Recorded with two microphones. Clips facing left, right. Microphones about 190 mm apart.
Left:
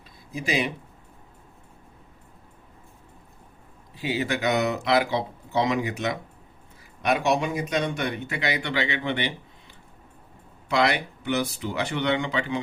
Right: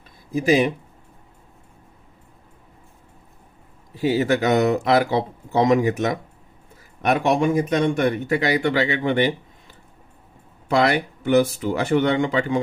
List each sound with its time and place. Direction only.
0.3 s speech: 45° right (ahead or behind)
4.0 s speech: 45° right (ahead or behind)
10.7 s speech: 45° right (ahead or behind)